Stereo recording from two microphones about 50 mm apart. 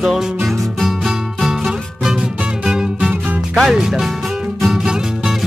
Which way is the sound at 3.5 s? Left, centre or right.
Centre.